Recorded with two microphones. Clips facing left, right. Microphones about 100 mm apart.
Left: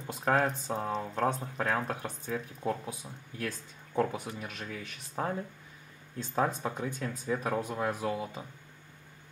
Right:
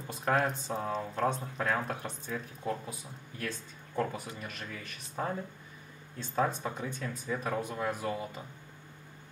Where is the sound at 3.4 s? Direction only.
10° left (ahead or behind).